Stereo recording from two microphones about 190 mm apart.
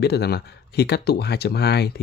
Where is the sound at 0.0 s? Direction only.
60° left (ahead or behind).